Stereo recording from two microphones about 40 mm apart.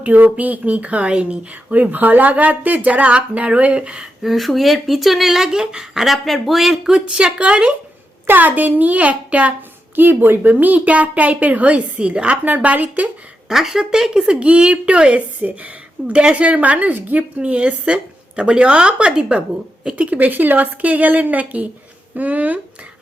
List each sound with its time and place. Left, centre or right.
0.3 s speech: right
1.7 s speech: right
4.2 s speech: centre
5.5 s speech: centre
6.2 s speech: centre
7.0 s a woman's voice: right
8.3 s a woman's voice: right
9.9 s speech: right
10.8 s speech: right
13.5 s a woman's voice: centre; by 15.2 s right
15.4 s speech: right
16.1 s a woman's voice: right
20.1 s a woman's voice: right